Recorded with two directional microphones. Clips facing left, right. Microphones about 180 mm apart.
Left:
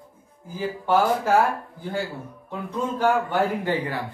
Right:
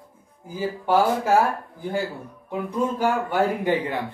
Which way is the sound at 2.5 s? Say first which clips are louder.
Right 3 dB; 10° right (ahead or behind).